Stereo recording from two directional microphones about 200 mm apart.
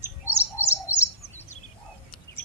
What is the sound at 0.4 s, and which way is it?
Bird, 10° right (ahead or behind).